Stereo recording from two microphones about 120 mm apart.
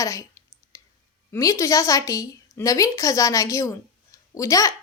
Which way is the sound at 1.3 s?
25° left (ahead or behind).